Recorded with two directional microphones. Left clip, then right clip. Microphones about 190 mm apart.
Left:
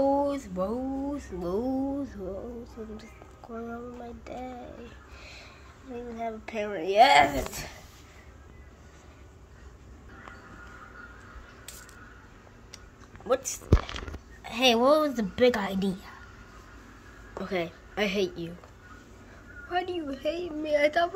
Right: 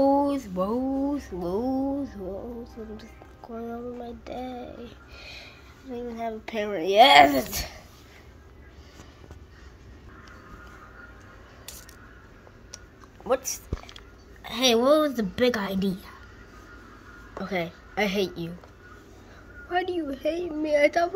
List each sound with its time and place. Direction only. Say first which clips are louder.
0.0 s a sound: right 3 dB; 10° right (ahead or behind)
1.4 s a sound: right 2 dB; centre (ahead or behind)
2.6 s speech: right 2 dB; centre (ahead or behind); by 7.2 s 20° right (ahead or behind)
7.2 s speech: right 6 dB; 30° right (ahead or behind)
13.3 s a woman's voice: even; centre (ahead or behind)
17.4 s a woman's voice: right 1 dB; centre (ahead or behind)
19.7 s a woman's voice: right 3 dB; 5° right (ahead or behind)